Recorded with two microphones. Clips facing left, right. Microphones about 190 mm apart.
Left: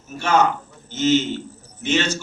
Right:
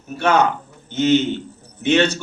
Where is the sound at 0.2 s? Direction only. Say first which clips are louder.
Right 2 dB; 60° right (ahead or behind).